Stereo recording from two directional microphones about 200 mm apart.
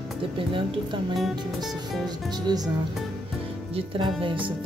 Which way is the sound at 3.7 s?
25° right (ahead or behind).